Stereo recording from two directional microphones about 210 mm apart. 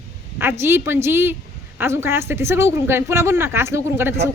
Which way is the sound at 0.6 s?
10° right (ahead or behind).